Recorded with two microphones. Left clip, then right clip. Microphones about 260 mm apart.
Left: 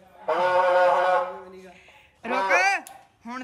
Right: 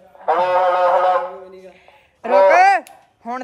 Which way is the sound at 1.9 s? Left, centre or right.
Centre.